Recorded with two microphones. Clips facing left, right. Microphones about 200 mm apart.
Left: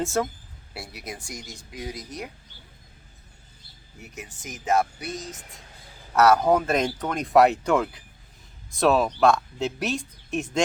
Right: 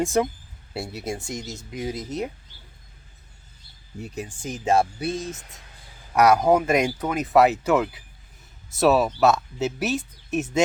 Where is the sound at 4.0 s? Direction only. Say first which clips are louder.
Right 8 dB; 30° right (ahead or behind).